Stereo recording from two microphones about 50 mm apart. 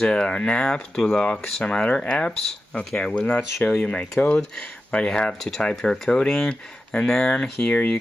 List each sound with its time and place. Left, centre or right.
0.0 s speech: centre